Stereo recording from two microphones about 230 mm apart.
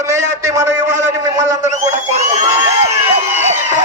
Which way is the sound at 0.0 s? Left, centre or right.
Centre.